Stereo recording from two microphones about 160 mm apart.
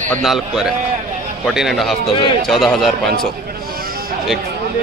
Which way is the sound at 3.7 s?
65° right (ahead or behind).